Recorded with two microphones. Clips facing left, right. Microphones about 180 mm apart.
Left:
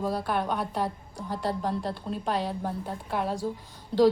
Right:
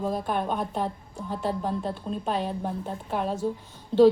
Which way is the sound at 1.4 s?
15° right (ahead or behind).